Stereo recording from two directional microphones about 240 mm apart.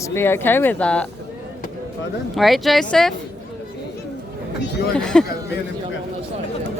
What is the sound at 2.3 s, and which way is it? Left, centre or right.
Speech, centre.